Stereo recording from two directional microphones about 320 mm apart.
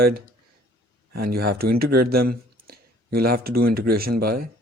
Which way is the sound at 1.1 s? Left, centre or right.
Right.